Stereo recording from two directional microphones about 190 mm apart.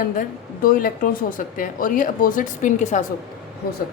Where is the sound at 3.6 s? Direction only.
55° left (ahead or behind).